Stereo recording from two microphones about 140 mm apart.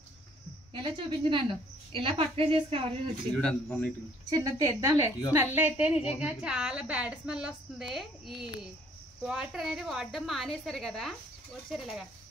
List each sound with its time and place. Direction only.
0.7 s a woman's voice: 35° right (ahead or behind)
3.3 s a man's voice: 10° left (ahead or behind)
4.3 s a woman's voice: 25° right (ahead or behind); by 12.1 s centre (ahead or behind)